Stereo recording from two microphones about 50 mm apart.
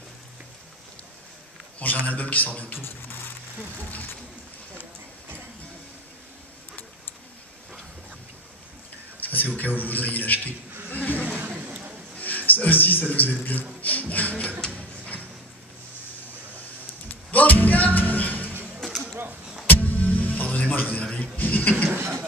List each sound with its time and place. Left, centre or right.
2.0 s a man's voice: left
2.7 s speech: left
9.3 s a man's voice: left
10.9 s a sound: left
11.2 s a sound: right
12.2 s music: left
13.1 s a man's voice: left
17.1 s music: left
19.6 s music: left
21.0 s a sound: left
21.4 s a sound: left
21.8 s beatboxing: right